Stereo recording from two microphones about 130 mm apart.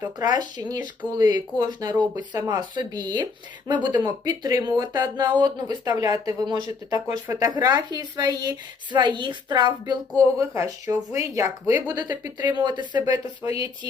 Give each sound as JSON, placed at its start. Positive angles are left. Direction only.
{"t": 0.0, "sound": "speech", "side_deg": -30}
{"t": 10.3, "sound": "speech", "side_deg": -25}
{"t": 12.4, "sound": "speech", "side_deg": -35}
{"t": 13.1, "sound": "speech", "side_deg": -25}